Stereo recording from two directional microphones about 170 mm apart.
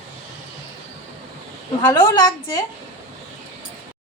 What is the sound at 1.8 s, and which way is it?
Speech, 20° left (ahead or behind).